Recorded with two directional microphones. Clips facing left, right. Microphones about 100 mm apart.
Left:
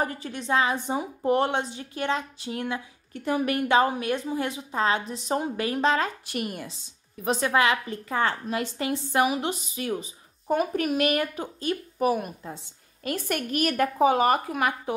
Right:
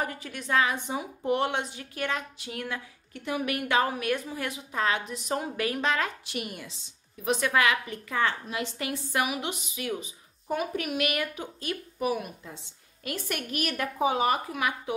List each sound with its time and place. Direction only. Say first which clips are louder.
0.0 s a woman's voice: left 4 dB; 35° left (ahead or behind)
6.2 s a woman's voice: left 4 dB; 45° left (ahead or behind)
7.2 s a woman's voice: left 2 dB; 30° left (ahead or behind)
8.7 s a woman's voice: left 5 dB; 30° left (ahead or behind)